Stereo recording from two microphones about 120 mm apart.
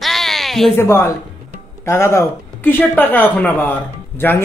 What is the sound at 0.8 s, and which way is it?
A woman's voice, 20° left (ahead or behind).